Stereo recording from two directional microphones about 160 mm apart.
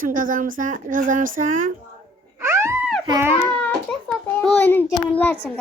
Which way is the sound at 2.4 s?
15° right (ahead or behind).